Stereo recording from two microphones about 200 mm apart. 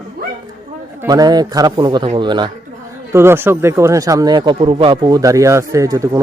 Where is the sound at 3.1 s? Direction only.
10° right (ahead or behind).